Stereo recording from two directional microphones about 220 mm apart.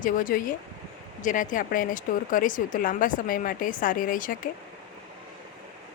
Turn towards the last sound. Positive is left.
turn(degrees=40)  # may be behind; listen again after turning